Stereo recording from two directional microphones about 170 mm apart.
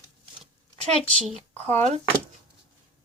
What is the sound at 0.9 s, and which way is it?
Speech, 40° right (ahead or behind).